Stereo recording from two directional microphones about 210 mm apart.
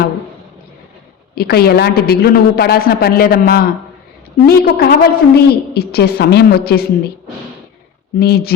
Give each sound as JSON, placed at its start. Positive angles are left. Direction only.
{"t": 1.4, "sound": "a woman's voice", "side_deg": 50}
{"t": 8.2, "sound": "a woman's voice", "side_deg": 50}